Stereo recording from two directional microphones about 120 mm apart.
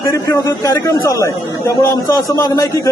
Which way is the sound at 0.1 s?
25° left (ahead or behind).